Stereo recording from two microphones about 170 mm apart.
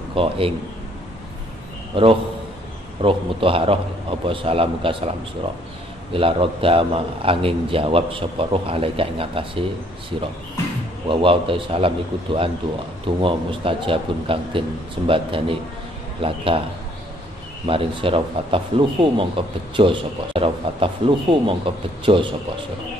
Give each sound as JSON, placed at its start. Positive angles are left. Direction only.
{"t": 0.1, "sound": "a man's voice", "side_deg": -30}
{"t": 2.0, "sound": "speech", "side_deg": -30}
{"t": 6.1, "sound": "speech", "side_deg": -30}
{"t": 11.1, "sound": "speech", "side_deg": -30}
{"t": 17.6, "sound": "speech", "side_deg": -30}